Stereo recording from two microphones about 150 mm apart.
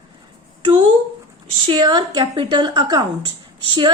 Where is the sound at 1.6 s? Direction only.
30° right (ahead or behind).